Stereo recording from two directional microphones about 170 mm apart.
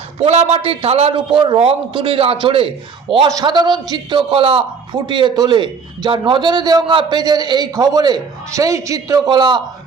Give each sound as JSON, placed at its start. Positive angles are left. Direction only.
{"t": 0.2, "sound": "a man's voice", "side_deg": -40}